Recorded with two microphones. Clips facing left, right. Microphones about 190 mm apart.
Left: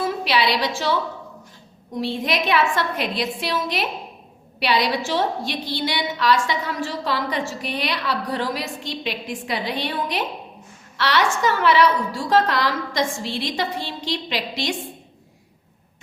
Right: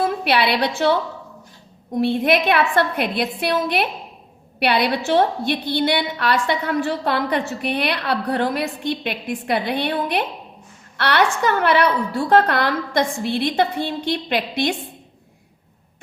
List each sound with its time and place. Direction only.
0.0 s a woman's voice: 55° right (ahead or behind)
2.0 s a woman's voice: 55° right (ahead or behind)